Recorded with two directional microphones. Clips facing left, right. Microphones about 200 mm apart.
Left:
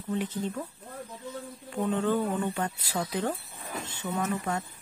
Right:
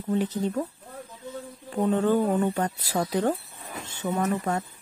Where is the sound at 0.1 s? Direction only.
40° right (ahead or behind).